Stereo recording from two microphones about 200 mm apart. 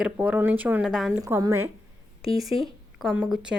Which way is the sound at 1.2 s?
15° right (ahead or behind).